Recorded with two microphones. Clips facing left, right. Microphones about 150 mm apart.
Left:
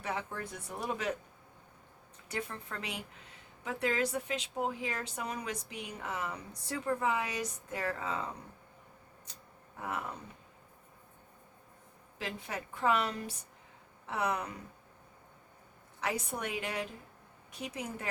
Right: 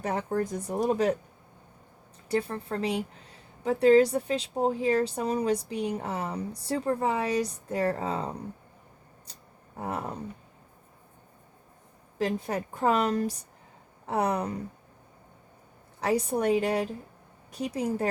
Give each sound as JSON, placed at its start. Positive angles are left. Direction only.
{"t": 0.0, "sound": "speech", "side_deg": -40}
{"t": 2.3, "sound": "speech", "side_deg": -35}
{"t": 9.7, "sound": "speech", "side_deg": -35}
{"t": 12.2, "sound": "speech", "side_deg": -40}
{"t": 16.0, "sound": "speech", "side_deg": -35}